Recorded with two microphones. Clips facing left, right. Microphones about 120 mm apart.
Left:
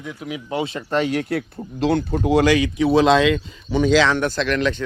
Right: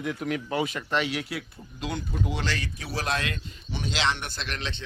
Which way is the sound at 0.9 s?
45° left (ahead or behind).